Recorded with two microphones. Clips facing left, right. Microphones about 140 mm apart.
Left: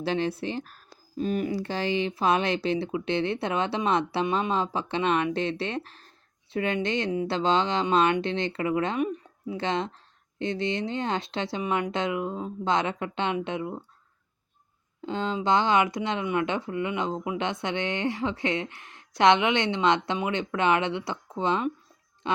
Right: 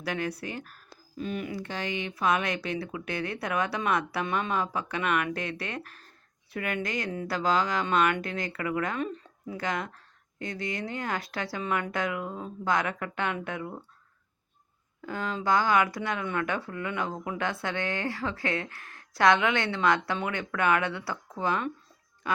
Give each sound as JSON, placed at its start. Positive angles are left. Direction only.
{"t": 0.0, "sound": "speech", "side_deg": 25}
{"t": 15.0, "sound": "speech", "side_deg": 25}